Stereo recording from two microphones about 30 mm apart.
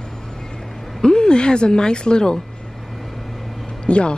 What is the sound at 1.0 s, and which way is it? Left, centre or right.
Speech, left.